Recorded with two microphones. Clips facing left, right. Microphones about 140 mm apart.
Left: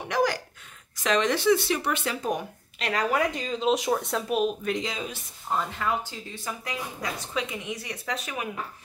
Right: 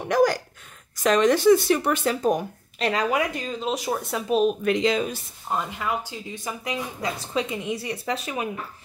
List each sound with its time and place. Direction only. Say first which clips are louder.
0.1 s a sound: right 5 dB; 45° right (ahead or behind)
1.0 s speech: right 5 dB; 45° right (ahead or behind)
2.8 s speech: right 4 dB; 25° right (ahead or behind)
3.1 s speech: right 1 dB; 10° right (ahead or behind)
4.6 s speech: right 8 dB; 80° right
5.5 s speech: right 1 dB; 15° right (ahead or behind)